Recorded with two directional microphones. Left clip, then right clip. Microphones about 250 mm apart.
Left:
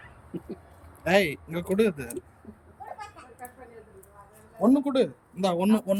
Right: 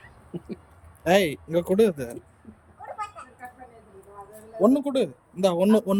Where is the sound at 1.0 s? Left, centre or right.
Centre.